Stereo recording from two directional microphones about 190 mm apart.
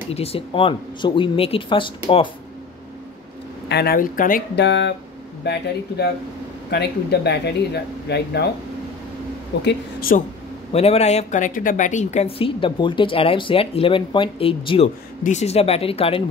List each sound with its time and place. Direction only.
0.1 s speech: 30° left (ahead or behind)
3.6 s speech: 60° left (ahead or behind)
4.6 s speech: 70° left (ahead or behind)
9.6 s speech: 60° left (ahead or behind)
10.7 s speech: 30° left (ahead or behind)